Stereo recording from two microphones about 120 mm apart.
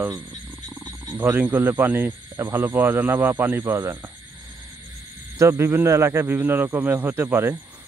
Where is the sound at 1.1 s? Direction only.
15° right (ahead or behind).